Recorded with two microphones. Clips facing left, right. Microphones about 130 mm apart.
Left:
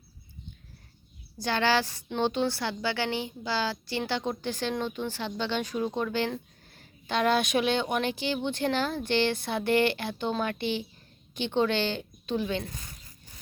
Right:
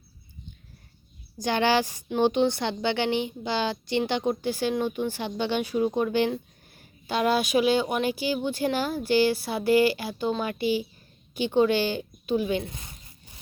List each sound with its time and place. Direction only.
1.4 s a woman's voice: 15° right (ahead or behind)